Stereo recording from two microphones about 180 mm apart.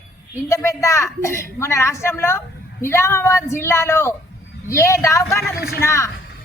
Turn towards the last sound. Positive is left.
turn(degrees=15)  # may be behind; listen again after turning